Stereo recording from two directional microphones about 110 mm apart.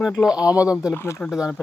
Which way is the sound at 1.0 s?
25° left (ahead or behind).